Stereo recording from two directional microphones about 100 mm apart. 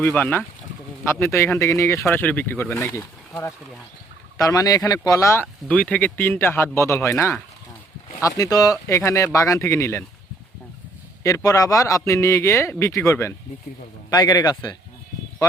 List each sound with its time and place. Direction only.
0.0 s speech: 15° left (ahead or behind)
2.1 s a man's voice: 20° left (ahead or behind)
5.6 s a man's voice: 15° left (ahead or behind); by 10.0 s 30° left (ahead or behind)
11.2 s a man's voice: 35° left (ahead or behind)
14.1 s a man's voice: 40° left (ahead or behind)